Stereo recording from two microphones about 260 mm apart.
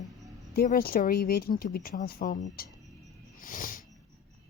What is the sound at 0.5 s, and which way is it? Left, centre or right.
A woman's voice, left.